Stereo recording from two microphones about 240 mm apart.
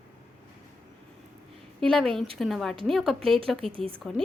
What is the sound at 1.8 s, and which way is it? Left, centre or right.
A woman's voice, centre.